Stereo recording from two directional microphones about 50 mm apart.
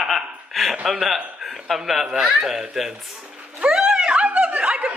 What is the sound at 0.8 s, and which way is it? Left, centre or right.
Speech, centre.